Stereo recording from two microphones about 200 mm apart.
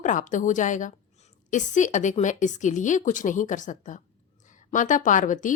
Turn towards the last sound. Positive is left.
turn(degrees=40)  # may be behind; listen again after turning